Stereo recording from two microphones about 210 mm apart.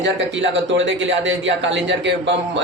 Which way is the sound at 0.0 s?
60° right (ahead or behind).